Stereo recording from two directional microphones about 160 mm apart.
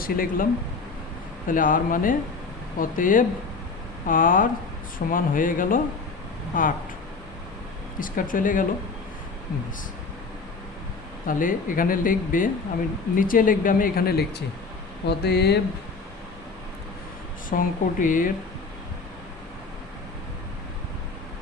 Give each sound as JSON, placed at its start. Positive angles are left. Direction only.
{"t": 0.0, "sound": "speech", "side_deg": 65}
{"t": 1.5, "sound": "speech", "side_deg": 60}
{"t": 7.9, "sound": "speech", "side_deg": 60}
{"t": 11.3, "sound": "speech", "side_deg": 60}
{"t": 15.0, "sound": "speech", "side_deg": 90}
{"t": 17.5, "sound": "speech", "side_deg": 60}